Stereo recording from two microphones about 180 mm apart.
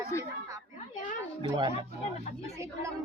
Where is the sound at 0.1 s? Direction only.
15° left (ahead or behind).